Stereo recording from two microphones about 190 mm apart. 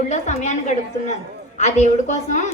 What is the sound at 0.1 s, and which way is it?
Speech, 40° left (ahead or behind).